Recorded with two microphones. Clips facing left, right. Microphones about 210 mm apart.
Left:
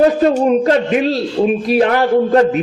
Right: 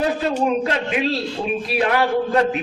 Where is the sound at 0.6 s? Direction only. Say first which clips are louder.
Left 8 dB; 45° left (ahead or behind).